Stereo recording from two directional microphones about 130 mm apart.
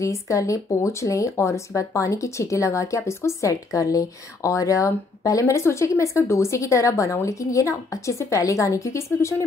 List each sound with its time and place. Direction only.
0.0 s speech: 25° left (ahead or behind)